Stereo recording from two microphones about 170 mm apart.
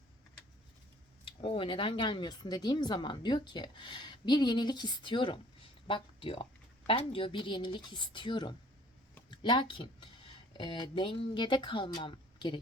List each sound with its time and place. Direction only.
1.4 s speech: 30° left (ahead or behind)